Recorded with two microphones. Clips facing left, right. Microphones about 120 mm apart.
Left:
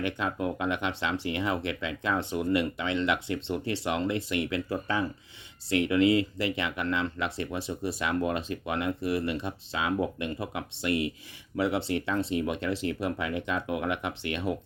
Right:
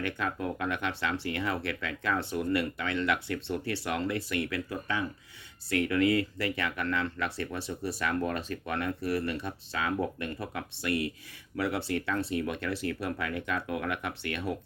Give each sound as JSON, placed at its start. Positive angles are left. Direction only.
{"t": 0.0, "sound": "speech", "side_deg": 20}
{"t": 5.7, "sound": "speech", "side_deg": 20}